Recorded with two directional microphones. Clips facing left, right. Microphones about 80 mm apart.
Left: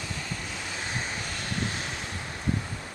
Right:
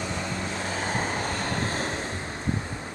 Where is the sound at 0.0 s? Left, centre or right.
Right.